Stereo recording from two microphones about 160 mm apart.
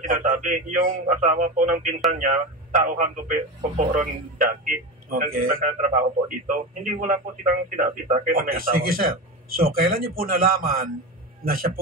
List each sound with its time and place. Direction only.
0.0 s a man's voice: 55° right (ahead or behind)